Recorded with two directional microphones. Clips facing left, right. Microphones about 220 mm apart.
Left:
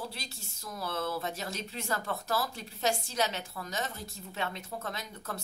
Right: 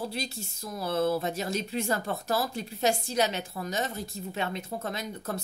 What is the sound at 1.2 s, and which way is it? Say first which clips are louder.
Speech: right 6 dB; 15° right (ahead or behind).